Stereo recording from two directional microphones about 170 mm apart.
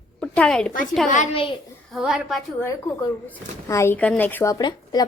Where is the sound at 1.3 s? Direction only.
30° left (ahead or behind).